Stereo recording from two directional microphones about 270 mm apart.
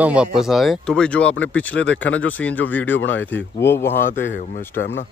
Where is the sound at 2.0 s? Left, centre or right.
Left.